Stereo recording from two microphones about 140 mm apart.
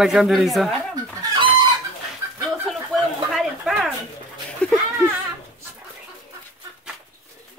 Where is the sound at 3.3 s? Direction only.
Centre (ahead or behind).